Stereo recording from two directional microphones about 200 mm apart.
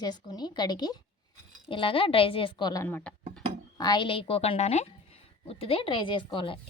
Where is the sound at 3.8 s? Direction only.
20° left (ahead or behind).